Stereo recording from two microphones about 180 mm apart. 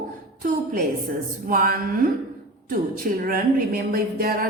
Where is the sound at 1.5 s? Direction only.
50° right (ahead or behind).